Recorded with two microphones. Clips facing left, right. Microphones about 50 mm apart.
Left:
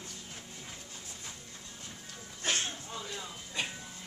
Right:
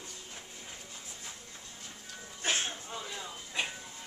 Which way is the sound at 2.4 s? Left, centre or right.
Centre.